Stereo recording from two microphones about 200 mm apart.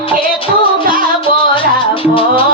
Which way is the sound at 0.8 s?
45° right (ahead or behind).